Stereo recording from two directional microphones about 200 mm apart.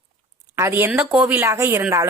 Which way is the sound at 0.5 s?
15° right (ahead or behind).